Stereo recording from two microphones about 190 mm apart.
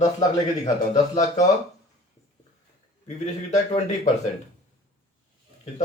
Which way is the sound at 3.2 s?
40° left (ahead or behind).